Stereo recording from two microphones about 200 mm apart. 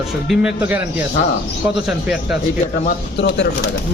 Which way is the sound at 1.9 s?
5° right (ahead or behind).